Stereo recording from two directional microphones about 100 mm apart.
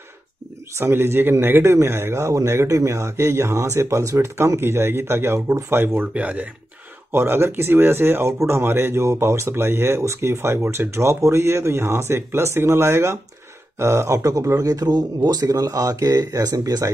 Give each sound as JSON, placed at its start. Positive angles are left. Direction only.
{"t": 0.7, "sound": "speech", "side_deg": -25}